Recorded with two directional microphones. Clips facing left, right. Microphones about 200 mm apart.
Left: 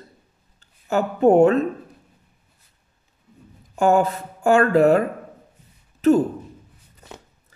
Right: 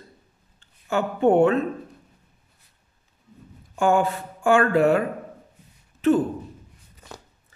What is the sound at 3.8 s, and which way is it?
Speech, 40° left (ahead or behind).